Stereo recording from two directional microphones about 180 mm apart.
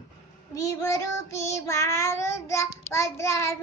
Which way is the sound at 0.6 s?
15° left (ahead or behind).